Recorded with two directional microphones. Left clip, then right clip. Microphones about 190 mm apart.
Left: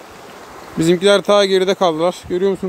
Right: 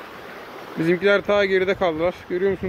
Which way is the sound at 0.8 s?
50° left (ahead or behind).